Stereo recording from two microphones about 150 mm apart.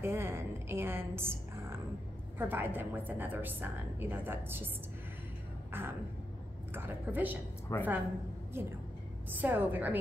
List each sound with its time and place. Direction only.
0.0 s a woman's voice: 15° right (ahead or behind)
5.7 s a sound: 15° right (ahead or behind)
6.7 s a woman's voice: 15° right (ahead or behind)
7.7 s a woman's voice: 20° left (ahead or behind)
9.4 s a woman's voice: 15° right (ahead or behind)